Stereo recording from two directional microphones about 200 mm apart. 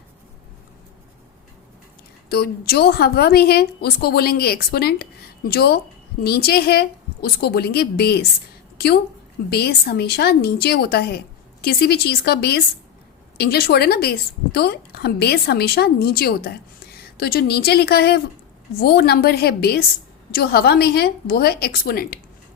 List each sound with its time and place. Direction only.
2.3 s a woman's voice: 50° left (ahead or behind)
9.5 s a woman's voice: 55° left (ahead or behind)